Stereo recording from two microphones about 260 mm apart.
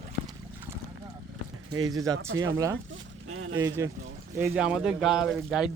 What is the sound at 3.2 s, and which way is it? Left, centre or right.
Speech, right.